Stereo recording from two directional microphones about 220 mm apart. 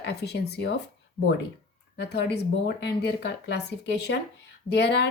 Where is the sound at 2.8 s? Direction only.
50° left (ahead or behind).